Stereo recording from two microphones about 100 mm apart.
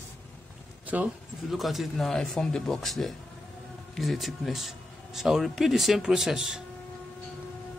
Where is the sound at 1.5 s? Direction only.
Centre (ahead or behind).